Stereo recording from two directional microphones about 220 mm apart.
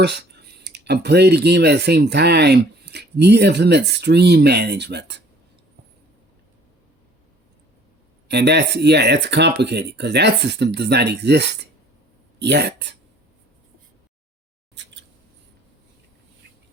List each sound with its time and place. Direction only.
0.0 s speech: 50° right (ahead or behind)
8.3 s speech: 50° right (ahead or behind)